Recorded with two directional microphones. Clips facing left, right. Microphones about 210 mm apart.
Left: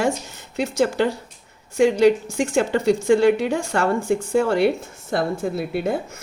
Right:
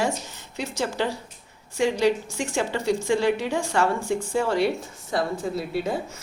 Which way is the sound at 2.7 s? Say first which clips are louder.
Left 6 dB; 55° left (ahead or behind).